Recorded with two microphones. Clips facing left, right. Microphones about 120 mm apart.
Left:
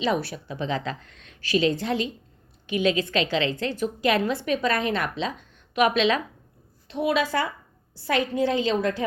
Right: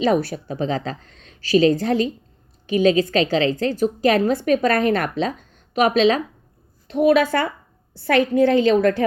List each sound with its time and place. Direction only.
0.0 s a woman's voice: 45° right (ahead or behind)
6.8 s a woman's voice: 55° right (ahead or behind)